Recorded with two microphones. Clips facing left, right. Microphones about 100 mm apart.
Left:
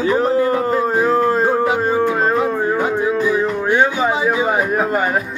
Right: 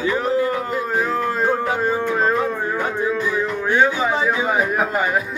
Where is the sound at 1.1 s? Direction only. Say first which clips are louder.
Left 6 dB; 40° left (ahead or behind).